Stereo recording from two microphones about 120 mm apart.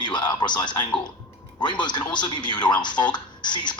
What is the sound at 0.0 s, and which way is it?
Speech, 40° left (ahead or behind).